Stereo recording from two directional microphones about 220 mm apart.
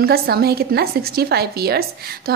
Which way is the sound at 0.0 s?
45° right (ahead or behind).